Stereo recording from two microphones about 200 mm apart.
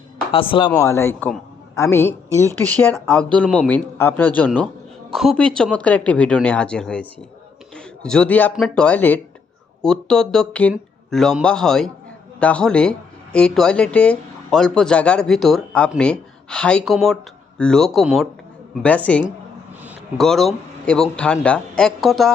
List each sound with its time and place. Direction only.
0.3 s a man's voice: 25° left (ahead or behind); by 19.2 s 5° left (ahead or behind)
19.8 s a sound: 10° right (ahead or behind)
20.2 s speech: centre (ahead or behind)